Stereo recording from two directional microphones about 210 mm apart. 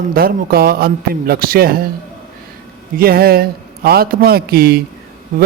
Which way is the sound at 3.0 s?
45° right (ahead or behind).